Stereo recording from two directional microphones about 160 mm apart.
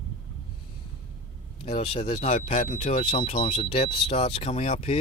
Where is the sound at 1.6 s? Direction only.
40° left (ahead or behind); by 3.0 s 55° left (ahead or behind).